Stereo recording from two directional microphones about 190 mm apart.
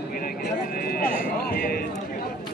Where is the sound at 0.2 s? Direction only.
50° left (ahead or behind).